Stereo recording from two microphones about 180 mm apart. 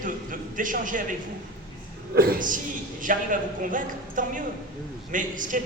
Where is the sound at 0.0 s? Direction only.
50° right (ahead or behind).